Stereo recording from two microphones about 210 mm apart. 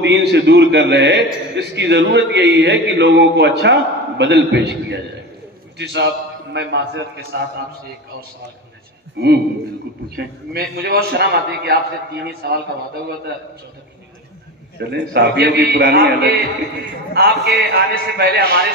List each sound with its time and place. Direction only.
0.0 s a man's voice: 55° right (ahead or behind)
9.2 s a man's voice: 50° right (ahead or behind)
14.8 s a man's voice: 50° right (ahead or behind)